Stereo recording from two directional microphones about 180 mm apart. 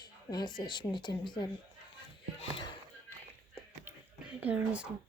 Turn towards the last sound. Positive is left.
turn(degrees=-5)  # may be behind; listen again after turning